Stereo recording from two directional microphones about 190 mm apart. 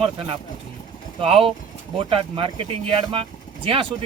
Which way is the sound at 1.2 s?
30° right (ahead or behind).